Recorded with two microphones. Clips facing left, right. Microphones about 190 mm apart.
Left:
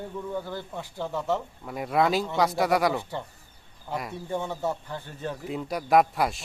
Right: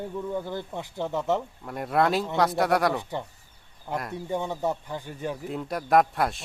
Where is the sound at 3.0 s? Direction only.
15° right (ahead or behind).